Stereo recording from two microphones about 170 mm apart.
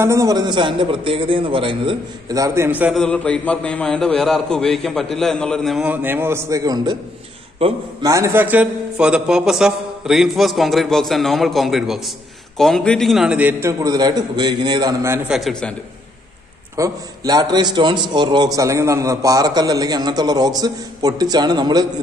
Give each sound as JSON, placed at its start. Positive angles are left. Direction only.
{"t": 0.0, "sound": "a man's voice", "side_deg": -20}
{"t": 3.0, "sound": "a man's voice", "side_deg": 5}
{"t": 5.9, "sound": "a man's voice", "side_deg": -15}
{"t": 8.0, "sound": "a man's voice", "side_deg": -20}
{"t": 15.2, "sound": "a man's voice", "side_deg": 0}
{"t": 16.7, "sound": "a man's voice", "side_deg": -20}